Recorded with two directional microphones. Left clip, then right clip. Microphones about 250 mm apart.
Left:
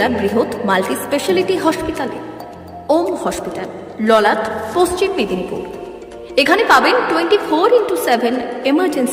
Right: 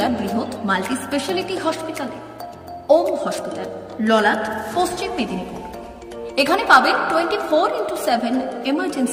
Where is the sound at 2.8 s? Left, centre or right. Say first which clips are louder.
Even; centre.